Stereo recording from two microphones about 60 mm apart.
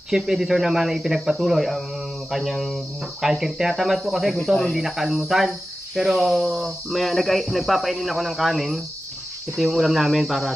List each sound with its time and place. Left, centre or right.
0.1 s speech: centre